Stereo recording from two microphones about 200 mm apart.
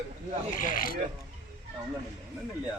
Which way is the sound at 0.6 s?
45° left (ahead or behind).